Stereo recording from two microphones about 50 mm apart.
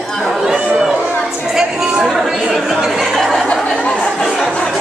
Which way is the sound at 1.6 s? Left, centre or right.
Centre.